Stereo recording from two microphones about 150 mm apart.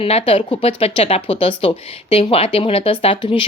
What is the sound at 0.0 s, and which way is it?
A woman's voice, 40° left (ahead or behind).